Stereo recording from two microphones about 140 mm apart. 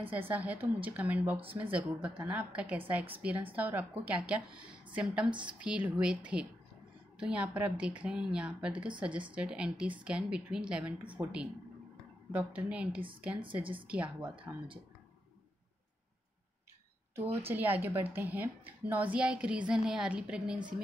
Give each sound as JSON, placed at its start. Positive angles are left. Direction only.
{"t": 0.0, "sound": "a woman's voice", "side_deg": -15}
{"t": 17.1, "sound": "a woman's voice", "side_deg": -15}